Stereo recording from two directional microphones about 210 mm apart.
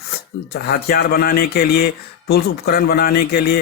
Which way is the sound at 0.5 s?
50° left (ahead or behind).